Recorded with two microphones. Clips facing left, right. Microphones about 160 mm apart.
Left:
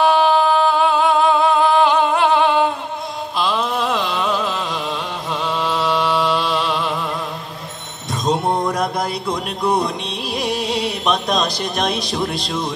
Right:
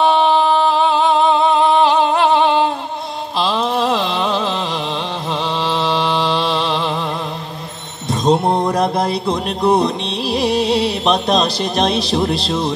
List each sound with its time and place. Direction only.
0.0 s singing: 25° right (ahead or behind)
3.3 s a sound: 30° right (ahead or behind)
5.6 s mantra: 30° right (ahead or behind)
8.1 s music: 30° right (ahead or behind)